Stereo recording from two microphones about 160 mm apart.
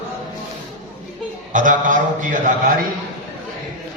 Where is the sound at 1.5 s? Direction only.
55° right (ahead or behind).